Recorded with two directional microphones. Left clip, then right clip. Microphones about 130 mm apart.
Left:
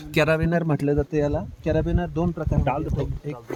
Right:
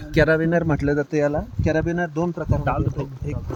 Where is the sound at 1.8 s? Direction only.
40° left (ahead or behind).